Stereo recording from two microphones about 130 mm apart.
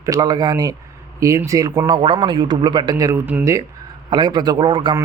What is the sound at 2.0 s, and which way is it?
A man's voice, 40° right (ahead or behind).